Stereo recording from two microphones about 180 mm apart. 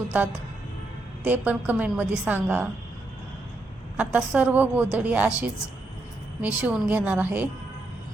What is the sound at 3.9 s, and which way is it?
Speech, 10° right (ahead or behind).